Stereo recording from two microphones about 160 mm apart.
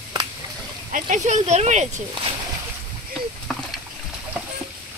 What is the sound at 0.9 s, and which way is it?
Speech, 50° right (ahead or behind).